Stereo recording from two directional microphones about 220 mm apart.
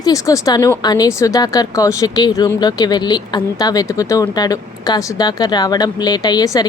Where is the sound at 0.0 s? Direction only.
15° left (ahead or behind).